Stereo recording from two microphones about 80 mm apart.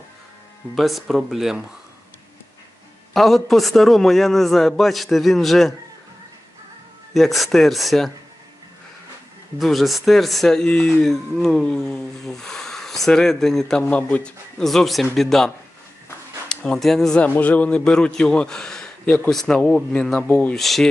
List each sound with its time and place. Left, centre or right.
0.8 s speech: centre
3.1 s speech: centre
7.1 s speech: centre
9.6 s a man's voice: centre
13.8 s a man's voice: centre
14.6 s speech: centre
17.2 s a man's voice: centre
20.6 s speech: centre